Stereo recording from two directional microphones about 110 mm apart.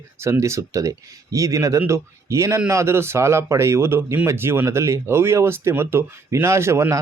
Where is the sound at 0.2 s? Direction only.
25° right (ahead or behind).